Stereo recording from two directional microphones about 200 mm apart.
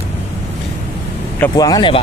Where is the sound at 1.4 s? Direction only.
20° left (ahead or behind).